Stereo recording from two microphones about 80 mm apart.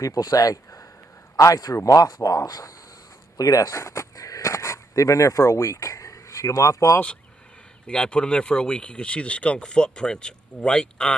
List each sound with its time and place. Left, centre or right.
0.0 s speech: left
7.8 s speech: centre